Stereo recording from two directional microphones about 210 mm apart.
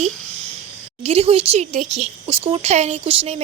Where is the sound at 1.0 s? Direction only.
30° right (ahead or behind).